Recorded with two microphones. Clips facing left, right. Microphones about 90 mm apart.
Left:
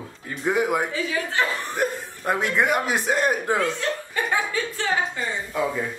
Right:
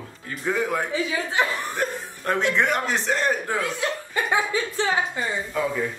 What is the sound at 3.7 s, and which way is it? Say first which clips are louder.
Speech: even; 15° right (ahead or behind).